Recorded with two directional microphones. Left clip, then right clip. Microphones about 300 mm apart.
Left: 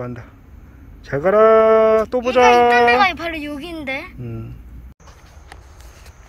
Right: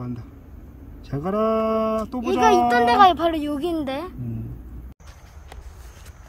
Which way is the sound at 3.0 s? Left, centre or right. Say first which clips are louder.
Right 2 dB; right.